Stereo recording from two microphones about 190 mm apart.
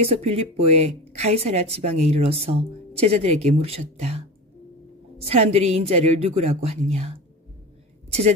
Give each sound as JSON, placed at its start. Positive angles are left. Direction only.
{"t": 0.0, "sound": "speech", "side_deg": -30}
{"t": 5.2, "sound": "speech", "side_deg": -35}